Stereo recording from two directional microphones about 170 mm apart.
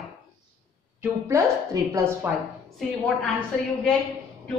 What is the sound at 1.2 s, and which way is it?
Speech, 15° right (ahead or behind).